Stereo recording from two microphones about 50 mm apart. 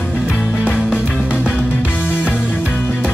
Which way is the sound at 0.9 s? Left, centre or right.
Left.